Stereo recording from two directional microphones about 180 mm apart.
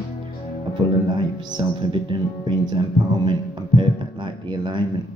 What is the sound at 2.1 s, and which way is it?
Speech, 25° right (ahead or behind).